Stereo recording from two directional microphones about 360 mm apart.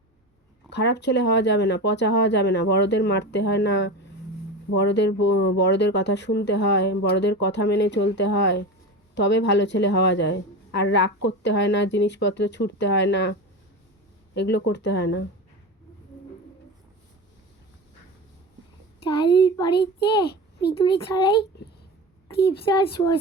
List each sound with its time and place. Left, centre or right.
0.7 s speech: left
14.3 s speech: left
19.0 s speech: centre
20.3 s a sound: left
21.1 s speech: centre
22.3 s speech: centre